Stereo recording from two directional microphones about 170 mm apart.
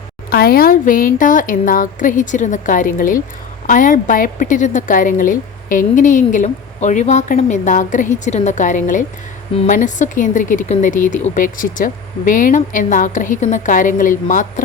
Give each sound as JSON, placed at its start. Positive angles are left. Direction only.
{"t": 0.3, "sound": "a woman's voice", "side_deg": 60}